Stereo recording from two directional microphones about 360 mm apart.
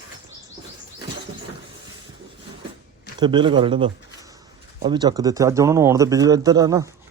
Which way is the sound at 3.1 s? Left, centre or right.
Centre.